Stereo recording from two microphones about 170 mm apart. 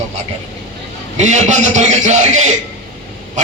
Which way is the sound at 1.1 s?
45° right (ahead or behind).